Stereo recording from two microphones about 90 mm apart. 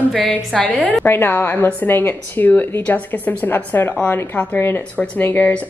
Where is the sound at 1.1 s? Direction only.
25° left (ahead or behind).